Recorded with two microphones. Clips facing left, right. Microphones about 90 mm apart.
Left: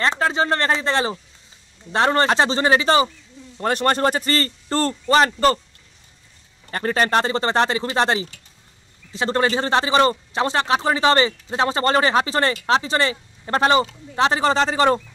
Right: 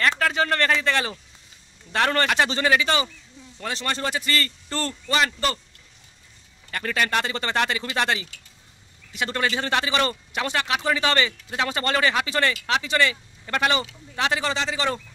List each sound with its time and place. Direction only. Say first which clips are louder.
0.0 s speech: left 2 dB; 25° left (ahead or behind)
3.6 s a man's voice: left 9 dB; 50° left (ahead or behind)
6.7 s a man's voice: left 5 dB; 35° left (ahead or behind)